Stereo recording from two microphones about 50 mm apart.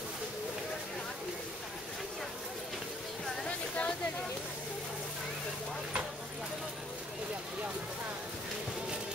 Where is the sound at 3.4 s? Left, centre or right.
Left.